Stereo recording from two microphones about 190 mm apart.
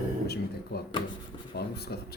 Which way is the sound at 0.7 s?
60° left (ahead or behind).